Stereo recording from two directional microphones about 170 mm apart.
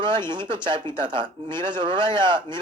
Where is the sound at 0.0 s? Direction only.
25° right (ahead or behind).